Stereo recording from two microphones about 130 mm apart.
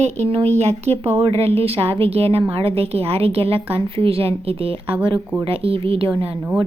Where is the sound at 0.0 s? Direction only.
60° right (ahead or behind).